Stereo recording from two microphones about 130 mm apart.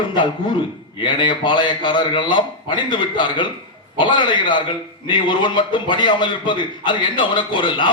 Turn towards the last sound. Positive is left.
turn(degrees=35)  # may be behind; listen again after turning